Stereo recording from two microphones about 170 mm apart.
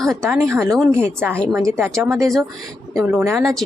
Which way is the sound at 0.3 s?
15° right (ahead or behind).